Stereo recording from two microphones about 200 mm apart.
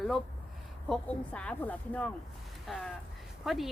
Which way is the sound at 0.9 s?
5° left (ahead or behind).